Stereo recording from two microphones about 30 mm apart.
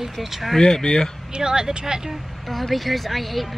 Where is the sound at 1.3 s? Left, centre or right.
Right.